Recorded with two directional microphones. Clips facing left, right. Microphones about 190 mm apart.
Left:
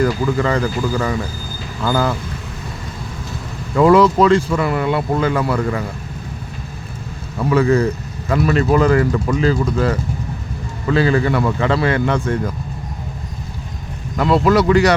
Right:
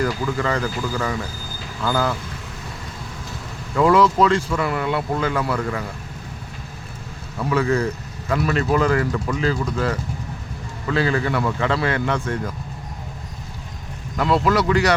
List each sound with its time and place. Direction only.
0.0 s speech: 25° left (ahead or behind)
3.8 s speech: 25° left (ahead or behind)
7.5 s speech: 20° left (ahead or behind)
8.4 s speech: 30° left (ahead or behind)
14.2 s speech: 25° left (ahead or behind)